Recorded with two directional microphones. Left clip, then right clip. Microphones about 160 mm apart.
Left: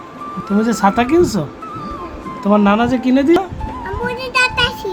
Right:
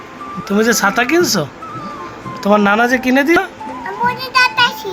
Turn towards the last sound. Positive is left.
turn(degrees=40)  # may be behind; listen again after turning